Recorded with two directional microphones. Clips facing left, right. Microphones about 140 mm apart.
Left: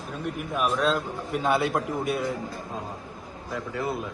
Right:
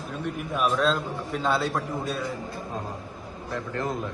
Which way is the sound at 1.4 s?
20° left (ahead or behind).